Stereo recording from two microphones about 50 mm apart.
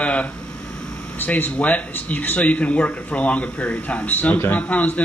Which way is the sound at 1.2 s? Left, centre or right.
Left.